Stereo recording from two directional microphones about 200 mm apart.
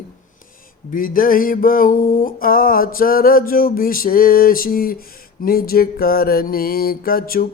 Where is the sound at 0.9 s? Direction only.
45° left (ahead or behind).